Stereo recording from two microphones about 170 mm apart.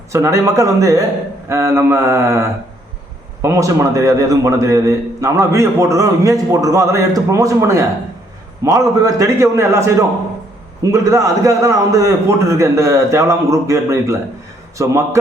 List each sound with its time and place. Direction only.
0.1 s a man's voice: 15° right (ahead or behind)